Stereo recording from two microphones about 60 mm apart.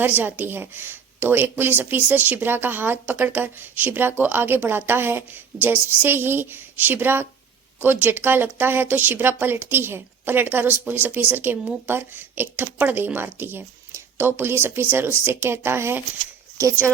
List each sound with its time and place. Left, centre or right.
0.0 s speech: right